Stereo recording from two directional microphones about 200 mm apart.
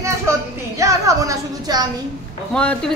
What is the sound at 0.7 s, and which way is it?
Speech, 15° right (ahead or behind).